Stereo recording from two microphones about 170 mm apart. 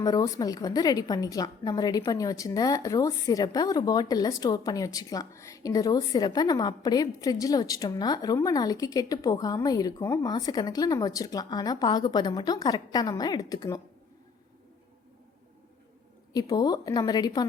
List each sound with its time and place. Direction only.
0.0 s a woman's voice: 20° left (ahead or behind)
16.3 s a woman's voice: 20° left (ahead or behind)